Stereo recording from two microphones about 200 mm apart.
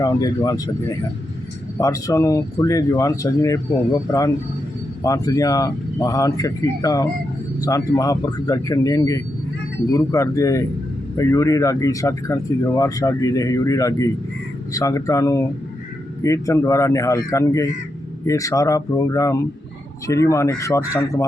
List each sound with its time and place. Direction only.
0.0 s speech: 20° left (ahead or behind)
5.0 s speech: 15° left (ahead or behind)